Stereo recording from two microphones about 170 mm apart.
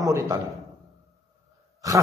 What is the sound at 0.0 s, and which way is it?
Speech, 20° right (ahead or behind).